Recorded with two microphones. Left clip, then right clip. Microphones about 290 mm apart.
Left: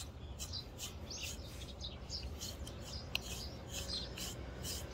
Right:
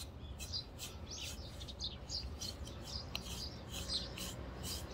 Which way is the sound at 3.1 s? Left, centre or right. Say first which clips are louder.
Left 7 dB; centre.